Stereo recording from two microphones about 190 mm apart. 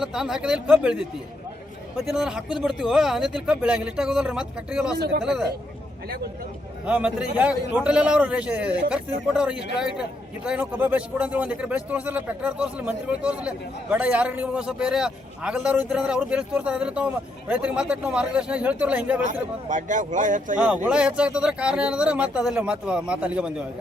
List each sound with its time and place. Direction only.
0.0 s a man's voice: 5° right (ahead or behind)
4.9 s a man's voice: 60° right (ahead or behind)
5.2 s a man's voice: 5° right (ahead or behind)
6.8 s a man's voice: 5° right (ahead or behind)
19.7 s speech: 40° right (ahead or behind)
20.6 s a man's voice: 5° right (ahead or behind)